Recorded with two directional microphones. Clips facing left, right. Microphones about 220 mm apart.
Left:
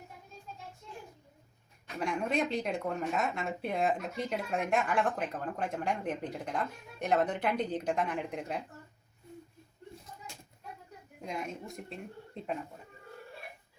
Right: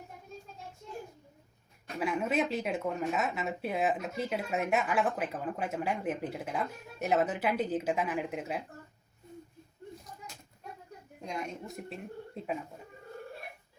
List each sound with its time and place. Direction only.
2.0 s speech: 5° right (ahead or behind)
11.2 s speech: centre (ahead or behind)